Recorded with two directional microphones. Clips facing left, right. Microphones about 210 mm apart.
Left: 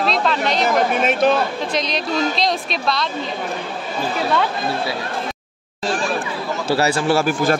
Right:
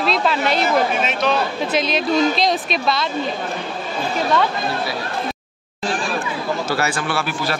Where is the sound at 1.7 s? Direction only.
5° right (ahead or behind).